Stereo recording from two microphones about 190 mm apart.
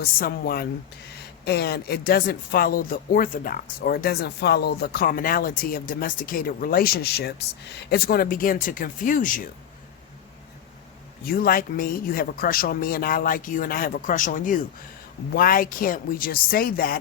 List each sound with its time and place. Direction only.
0.0 s speech: 50° left (ahead or behind)
11.3 s speech: 50° left (ahead or behind)